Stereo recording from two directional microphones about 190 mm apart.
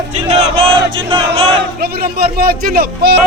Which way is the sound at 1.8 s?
55° right (ahead or behind).